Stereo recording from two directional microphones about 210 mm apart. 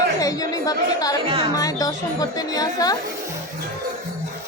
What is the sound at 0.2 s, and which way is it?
A woman's voice, 15° left (ahead or behind).